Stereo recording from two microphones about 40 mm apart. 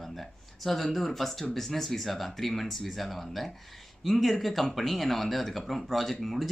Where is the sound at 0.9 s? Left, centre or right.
Centre.